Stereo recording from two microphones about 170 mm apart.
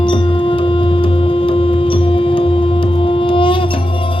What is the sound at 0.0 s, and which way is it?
Music, 30° left (ahead or behind).